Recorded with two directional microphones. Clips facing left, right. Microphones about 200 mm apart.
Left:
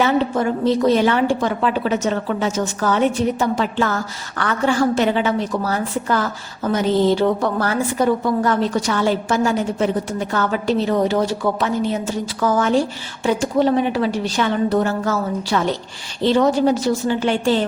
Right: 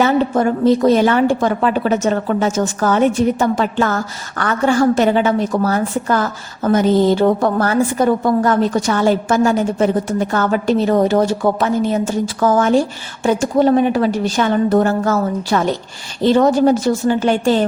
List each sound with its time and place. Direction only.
0.0 s a woman's voice: 50° right (ahead or behind)